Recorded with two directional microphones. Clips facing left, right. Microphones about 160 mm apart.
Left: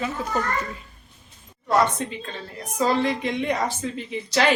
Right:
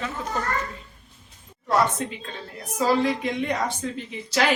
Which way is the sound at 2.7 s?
5° right (ahead or behind).